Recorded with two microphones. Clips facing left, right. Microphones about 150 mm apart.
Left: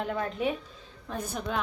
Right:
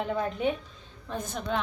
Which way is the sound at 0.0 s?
Centre (ahead or behind).